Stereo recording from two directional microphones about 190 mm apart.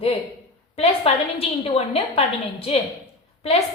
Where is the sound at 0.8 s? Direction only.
30° left (ahead or behind).